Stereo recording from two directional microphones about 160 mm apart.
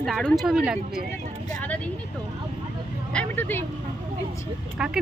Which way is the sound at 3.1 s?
10° left (ahead or behind).